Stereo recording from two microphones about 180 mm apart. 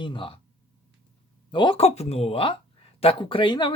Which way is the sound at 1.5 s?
25° left (ahead or behind).